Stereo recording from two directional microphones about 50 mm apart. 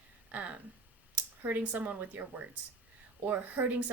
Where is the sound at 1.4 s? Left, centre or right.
Right.